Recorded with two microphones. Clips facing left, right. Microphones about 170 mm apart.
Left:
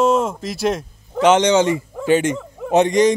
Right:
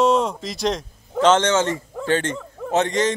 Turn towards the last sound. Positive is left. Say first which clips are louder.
# left 6 dB
turn(degrees=15)  # may be behind; listen again after turning